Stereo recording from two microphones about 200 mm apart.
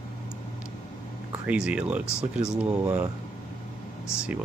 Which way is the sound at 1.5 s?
5° right (ahead or behind).